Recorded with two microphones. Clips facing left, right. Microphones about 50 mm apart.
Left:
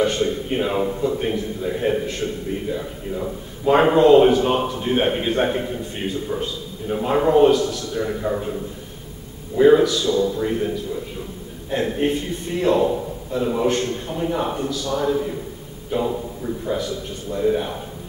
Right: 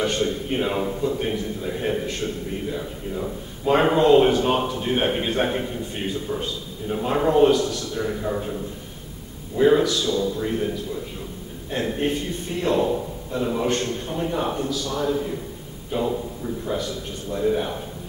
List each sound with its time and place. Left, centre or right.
0.5 s a man's voice: centre
7.5 s a man's voice: centre
9.6 s a man's voice: centre
10.0 s speech: left
10.4 s a man's voice: centre
11.7 s a man's voice: centre
15.0 s a man's voice: centre
17.3 s a man's voice: centre